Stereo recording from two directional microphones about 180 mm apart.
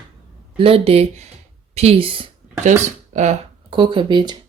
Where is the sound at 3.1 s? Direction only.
40° right (ahead or behind).